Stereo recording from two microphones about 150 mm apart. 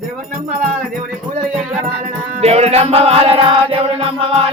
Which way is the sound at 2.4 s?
45° right (ahead or behind).